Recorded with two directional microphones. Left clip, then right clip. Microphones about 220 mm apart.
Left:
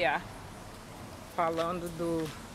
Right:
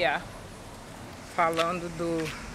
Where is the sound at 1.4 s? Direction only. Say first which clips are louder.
Right 5 dB; 5° left (ahead or behind).